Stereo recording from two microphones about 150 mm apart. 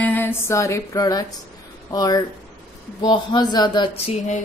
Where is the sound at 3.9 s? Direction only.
50° left (ahead or behind).